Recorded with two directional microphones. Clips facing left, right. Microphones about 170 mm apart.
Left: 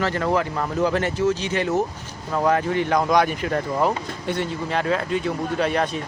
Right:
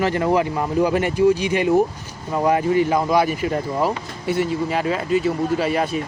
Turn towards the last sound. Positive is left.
turn(degrees=-5)  # may be behind; listen again after turning